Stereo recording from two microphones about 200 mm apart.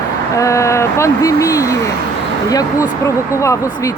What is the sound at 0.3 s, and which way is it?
Speech, 15° left (ahead or behind).